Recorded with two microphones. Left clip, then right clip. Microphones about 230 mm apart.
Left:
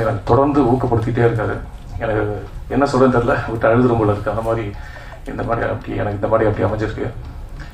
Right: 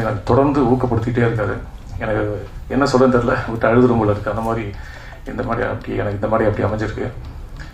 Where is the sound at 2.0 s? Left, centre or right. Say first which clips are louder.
Left 1 dB; right.